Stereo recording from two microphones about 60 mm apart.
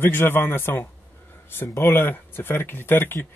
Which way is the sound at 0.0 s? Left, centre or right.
Left.